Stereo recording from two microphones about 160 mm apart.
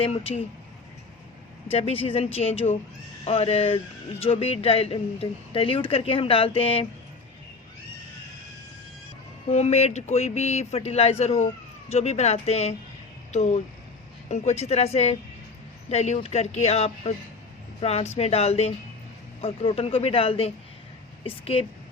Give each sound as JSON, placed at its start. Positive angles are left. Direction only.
{"t": 0.0, "sound": "speech", "side_deg": 40}
{"t": 1.7, "sound": "speech", "side_deg": 35}
{"t": 9.5, "sound": "speech", "side_deg": 45}